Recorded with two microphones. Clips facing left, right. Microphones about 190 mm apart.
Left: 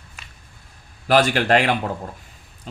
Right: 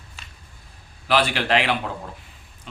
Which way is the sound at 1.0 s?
45° left (ahead or behind).